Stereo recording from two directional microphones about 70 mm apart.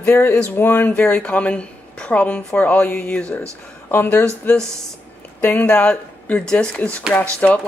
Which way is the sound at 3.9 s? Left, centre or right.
Left.